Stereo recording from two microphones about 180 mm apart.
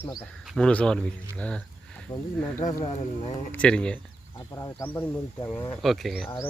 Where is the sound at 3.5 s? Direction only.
5° left (ahead or behind).